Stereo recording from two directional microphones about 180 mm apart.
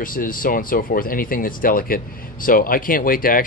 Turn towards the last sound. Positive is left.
turn(degrees=50)  # may be behind; listen again after turning